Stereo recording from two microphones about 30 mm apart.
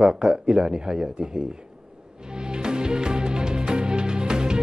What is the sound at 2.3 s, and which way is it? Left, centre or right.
Music, right.